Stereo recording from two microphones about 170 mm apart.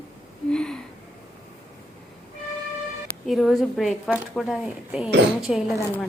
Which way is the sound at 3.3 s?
Centre (ahead or behind).